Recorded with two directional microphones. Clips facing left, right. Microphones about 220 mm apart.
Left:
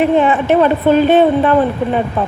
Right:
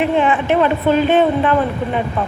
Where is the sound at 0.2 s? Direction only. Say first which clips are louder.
Left 3 dB; 40° left (ahead or behind).